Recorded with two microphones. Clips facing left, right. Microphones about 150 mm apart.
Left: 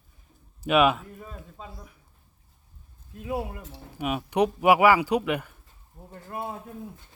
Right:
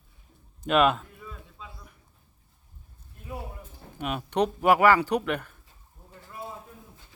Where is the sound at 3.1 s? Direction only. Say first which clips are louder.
Left 8 dB; 90° left.